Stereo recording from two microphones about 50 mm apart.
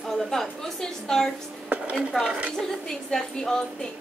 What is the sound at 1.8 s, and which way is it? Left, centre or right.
Speech, centre.